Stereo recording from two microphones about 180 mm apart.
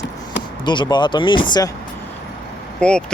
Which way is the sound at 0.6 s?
25° left (ahead or behind).